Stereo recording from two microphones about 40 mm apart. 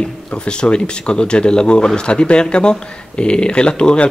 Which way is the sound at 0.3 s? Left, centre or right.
Left.